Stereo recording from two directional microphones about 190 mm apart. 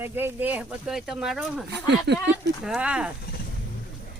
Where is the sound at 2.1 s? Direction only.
65° right (ahead or behind).